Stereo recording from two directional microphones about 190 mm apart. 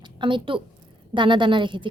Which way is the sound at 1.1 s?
25° right (ahead or behind).